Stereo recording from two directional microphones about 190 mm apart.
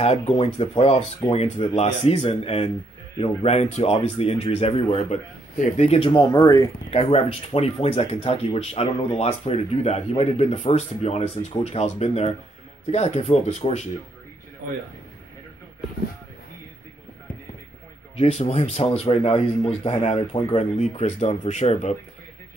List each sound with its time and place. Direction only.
0.0 s speech: 35° left (ahead or behind)
6.9 s speech: 30° left (ahead or behind)
18.1 s speech: 30° left (ahead or behind)